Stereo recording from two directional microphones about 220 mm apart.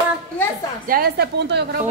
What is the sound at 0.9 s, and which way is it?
Speech, 45° right (ahead or behind).